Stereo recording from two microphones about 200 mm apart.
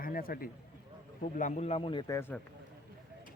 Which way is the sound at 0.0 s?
45° left (ahead or behind).